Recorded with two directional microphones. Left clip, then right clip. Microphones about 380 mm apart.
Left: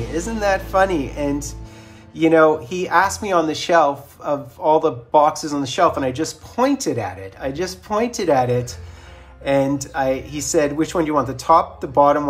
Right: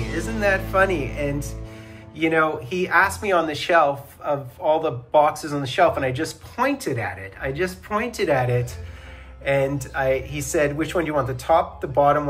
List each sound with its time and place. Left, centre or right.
0.1 s speech: centre
2.1 s speech: centre